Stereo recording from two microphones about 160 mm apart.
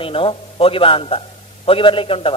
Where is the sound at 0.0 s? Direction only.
35° left (ahead or behind).